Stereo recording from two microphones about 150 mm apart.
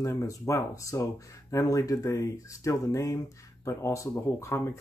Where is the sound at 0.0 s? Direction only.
20° left (ahead or behind).